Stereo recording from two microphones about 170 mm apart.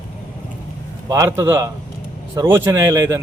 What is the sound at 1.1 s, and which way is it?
A man's voice, 20° right (ahead or behind).